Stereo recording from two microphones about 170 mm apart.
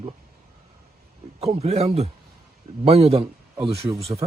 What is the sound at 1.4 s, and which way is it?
Speech, 40° right (ahead or behind).